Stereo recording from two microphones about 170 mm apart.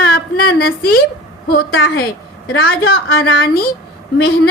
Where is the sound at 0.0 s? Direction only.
65° left (ahead or behind).